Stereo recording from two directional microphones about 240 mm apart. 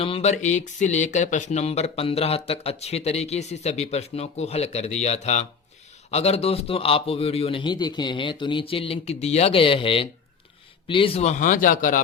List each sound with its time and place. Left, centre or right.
0.0 s speech: left